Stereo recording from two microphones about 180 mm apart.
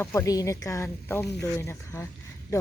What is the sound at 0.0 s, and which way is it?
Speech, 15° left (ahead or behind).